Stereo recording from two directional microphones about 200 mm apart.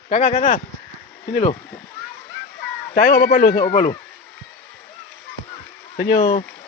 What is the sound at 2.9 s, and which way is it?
Speech, 45° left (ahead or behind).